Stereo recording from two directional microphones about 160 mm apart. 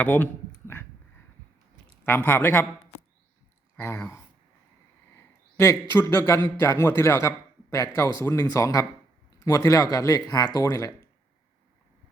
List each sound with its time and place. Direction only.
0.0 s speech: 10° left (ahead or behind)
2.0 s speech: 10° left (ahead or behind)
3.8 s a man's voice: 15° left (ahead or behind)